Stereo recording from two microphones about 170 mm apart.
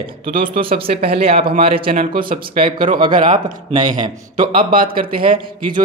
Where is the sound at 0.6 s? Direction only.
30° right (ahead or behind).